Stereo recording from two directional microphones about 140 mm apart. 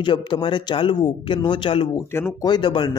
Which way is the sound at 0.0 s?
35° left (ahead or behind).